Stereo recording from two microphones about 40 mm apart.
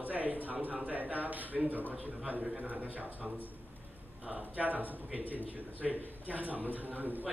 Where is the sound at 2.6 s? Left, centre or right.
Right.